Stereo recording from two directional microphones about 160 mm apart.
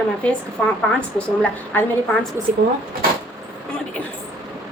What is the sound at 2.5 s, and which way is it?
Speech, 50° right (ahead or behind).